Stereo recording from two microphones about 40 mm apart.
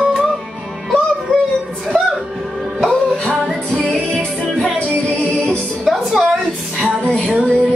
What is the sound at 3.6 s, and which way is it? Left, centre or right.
Music, left.